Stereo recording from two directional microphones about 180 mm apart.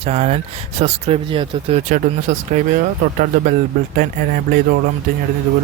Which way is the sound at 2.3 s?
45° right (ahead or behind).